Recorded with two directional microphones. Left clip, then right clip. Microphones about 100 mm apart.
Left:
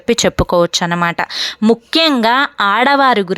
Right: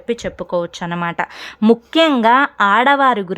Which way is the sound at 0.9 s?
20° left (ahead or behind).